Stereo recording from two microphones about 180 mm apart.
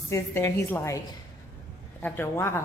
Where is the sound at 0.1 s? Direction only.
15° left (ahead or behind).